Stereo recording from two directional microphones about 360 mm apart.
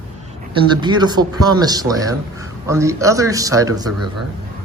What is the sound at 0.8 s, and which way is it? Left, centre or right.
A man's voice, centre.